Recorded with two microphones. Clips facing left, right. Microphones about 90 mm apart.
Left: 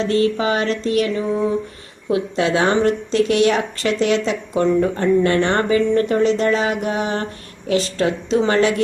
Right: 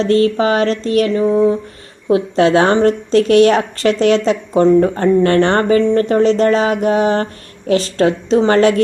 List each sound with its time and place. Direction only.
0.0 s speech: 45° right (ahead or behind)
1.2 s a sound: 25° right (ahead or behind)
2.0 s speech: 35° right (ahead or behind)